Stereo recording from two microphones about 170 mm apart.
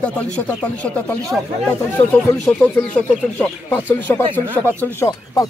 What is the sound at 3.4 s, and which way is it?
Speech, 10° left (ahead or behind).